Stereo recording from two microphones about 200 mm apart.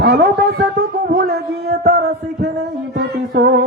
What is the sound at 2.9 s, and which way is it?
Music, 55° right (ahead or behind).